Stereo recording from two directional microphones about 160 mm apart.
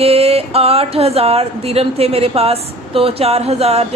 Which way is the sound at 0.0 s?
40° right (ahead or behind).